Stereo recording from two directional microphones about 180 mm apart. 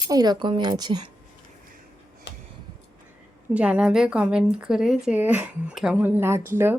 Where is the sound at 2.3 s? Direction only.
75° left (ahead or behind).